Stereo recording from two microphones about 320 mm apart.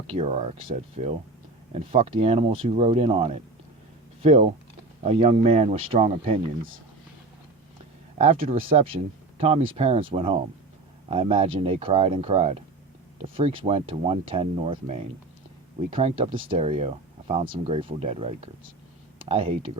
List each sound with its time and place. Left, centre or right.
0.1 s speech: centre
8.2 s speech: centre